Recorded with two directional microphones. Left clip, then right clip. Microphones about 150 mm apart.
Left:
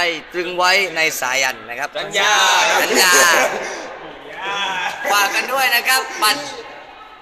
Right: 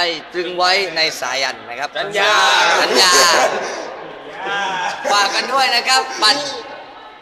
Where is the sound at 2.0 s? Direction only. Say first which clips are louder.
Right 1 dB; 55° left (ahead or behind).